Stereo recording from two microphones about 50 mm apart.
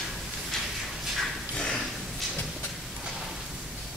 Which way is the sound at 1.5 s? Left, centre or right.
Left.